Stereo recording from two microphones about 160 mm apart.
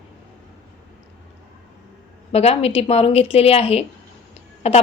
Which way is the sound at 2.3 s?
40° left (ahead or behind).